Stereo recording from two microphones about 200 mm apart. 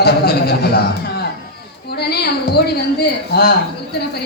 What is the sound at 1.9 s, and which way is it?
Speech, 55° left (ahead or behind).